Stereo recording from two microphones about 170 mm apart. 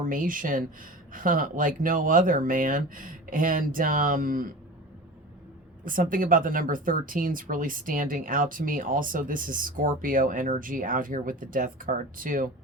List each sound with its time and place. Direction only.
0.0 s speech: 55° right (ahead or behind)
5.8 s speech: 55° right (ahead or behind)